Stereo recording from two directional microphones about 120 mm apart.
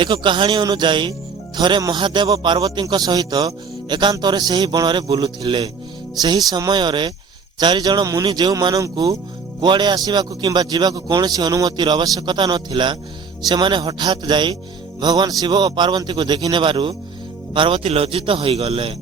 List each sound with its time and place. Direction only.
0.0 s a man's voice: 45° right (ahead or behind)